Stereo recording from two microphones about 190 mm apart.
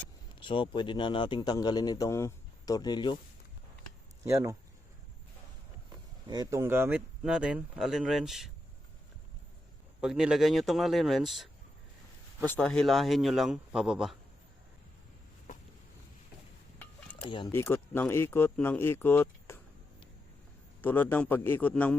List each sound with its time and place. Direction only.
0.3 s a man's voice: 25° left (ahead or behind)
4.2 s speech: 15° right (ahead or behind)
6.2 s speech: 20° right (ahead or behind); by 8.4 s centre (ahead or behind)
10.0 s speech: 5° right (ahead or behind)
12.5 s speech: 5° left (ahead or behind)
17.2 s a man's voice: 25° left (ahead or behind)
17.5 s speech: 10° left (ahead or behind)
20.8 s speech: 10° left (ahead or behind)